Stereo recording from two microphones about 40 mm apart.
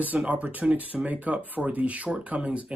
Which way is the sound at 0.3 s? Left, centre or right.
Right.